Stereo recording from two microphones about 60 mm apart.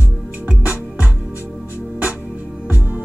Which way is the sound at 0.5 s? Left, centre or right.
Right.